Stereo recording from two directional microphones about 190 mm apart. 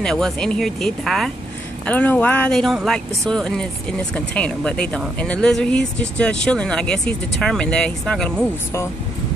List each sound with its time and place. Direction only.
0.0 s speech: 5° left (ahead or behind)